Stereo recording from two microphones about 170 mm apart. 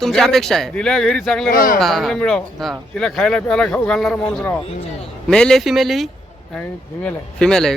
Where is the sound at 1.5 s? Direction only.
55° left (ahead or behind).